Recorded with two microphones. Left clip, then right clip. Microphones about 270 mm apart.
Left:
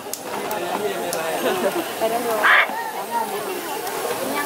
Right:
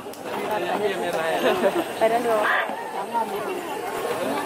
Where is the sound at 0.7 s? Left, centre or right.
Centre.